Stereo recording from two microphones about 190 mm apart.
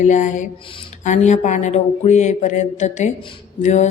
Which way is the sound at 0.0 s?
40° left (ahead or behind).